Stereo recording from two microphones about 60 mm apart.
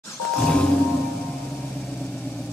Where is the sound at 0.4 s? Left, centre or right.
Centre.